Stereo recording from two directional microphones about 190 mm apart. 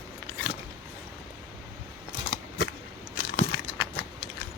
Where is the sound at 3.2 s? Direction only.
65° left (ahead or behind).